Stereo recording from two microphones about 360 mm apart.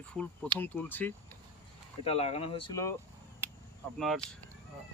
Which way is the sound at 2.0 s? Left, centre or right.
Centre.